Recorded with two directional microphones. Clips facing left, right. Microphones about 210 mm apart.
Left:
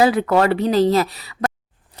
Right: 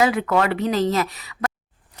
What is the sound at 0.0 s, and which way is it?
A woman's voice, 35° left (ahead or behind).